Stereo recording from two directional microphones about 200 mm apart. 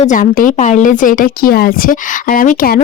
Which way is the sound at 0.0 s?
40° left (ahead or behind).